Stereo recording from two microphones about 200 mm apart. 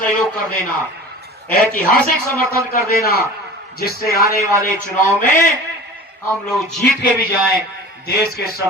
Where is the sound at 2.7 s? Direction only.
50° left (ahead or behind).